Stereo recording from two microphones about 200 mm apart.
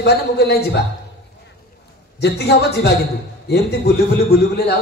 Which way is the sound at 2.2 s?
55° left (ahead or behind).